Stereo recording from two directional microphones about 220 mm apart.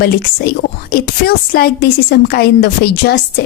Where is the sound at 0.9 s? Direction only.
45° left (ahead or behind).